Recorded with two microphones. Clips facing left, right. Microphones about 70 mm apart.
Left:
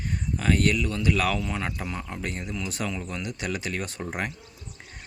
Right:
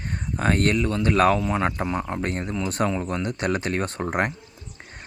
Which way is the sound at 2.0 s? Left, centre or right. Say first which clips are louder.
Right 6 dB; right.